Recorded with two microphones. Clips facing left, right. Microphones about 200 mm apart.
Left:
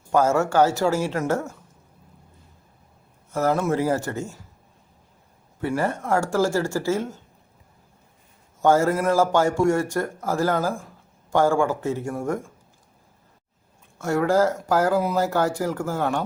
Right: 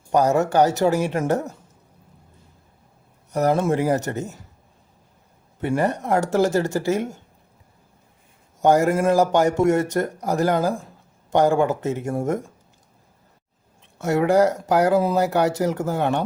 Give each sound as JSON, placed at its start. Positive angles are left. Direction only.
{"t": 0.1, "sound": "speech", "side_deg": -15}
{"t": 3.3, "sound": "speech", "side_deg": -20}
{"t": 5.5, "sound": "speech", "side_deg": -20}
{"t": 8.6, "sound": "speech", "side_deg": -15}
{"t": 14.0, "sound": "speech", "side_deg": -20}